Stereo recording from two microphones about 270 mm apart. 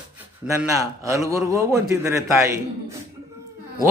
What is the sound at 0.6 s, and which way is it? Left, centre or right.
A man's voice, centre.